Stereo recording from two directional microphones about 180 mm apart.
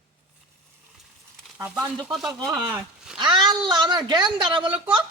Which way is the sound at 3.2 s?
25° right (ahead or behind).